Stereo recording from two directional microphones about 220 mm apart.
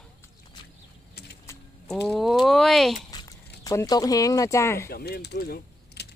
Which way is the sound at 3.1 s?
15° left (ahead or behind).